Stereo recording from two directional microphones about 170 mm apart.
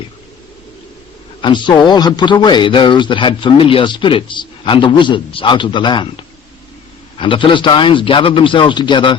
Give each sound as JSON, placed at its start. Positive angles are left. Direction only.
{"t": 1.4, "sound": "speech", "side_deg": 30}
{"t": 7.2, "sound": "speech", "side_deg": 30}